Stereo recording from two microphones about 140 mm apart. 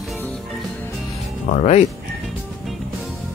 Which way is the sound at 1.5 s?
50° left (ahead or behind).